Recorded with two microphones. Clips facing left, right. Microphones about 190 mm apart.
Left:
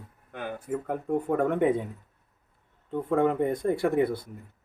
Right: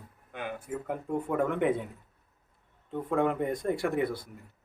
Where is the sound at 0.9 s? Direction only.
45° left (ahead or behind).